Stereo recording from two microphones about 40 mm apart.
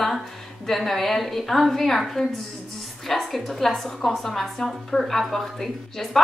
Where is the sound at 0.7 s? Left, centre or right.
Centre.